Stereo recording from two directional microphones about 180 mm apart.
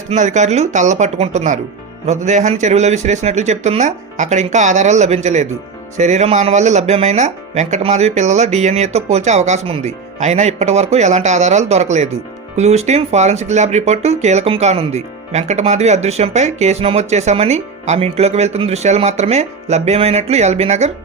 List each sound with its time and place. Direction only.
0.1 s speech: 40° right (ahead or behind)